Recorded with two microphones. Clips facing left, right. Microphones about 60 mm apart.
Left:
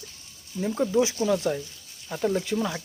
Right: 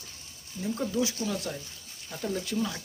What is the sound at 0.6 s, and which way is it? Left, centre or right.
Speech, left.